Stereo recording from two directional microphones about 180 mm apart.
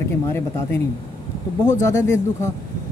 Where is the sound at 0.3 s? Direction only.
15° left (ahead or behind).